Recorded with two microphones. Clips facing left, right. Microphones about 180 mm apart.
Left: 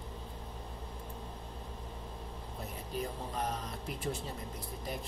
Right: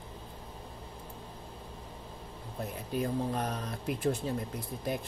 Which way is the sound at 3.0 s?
60° right (ahead or behind).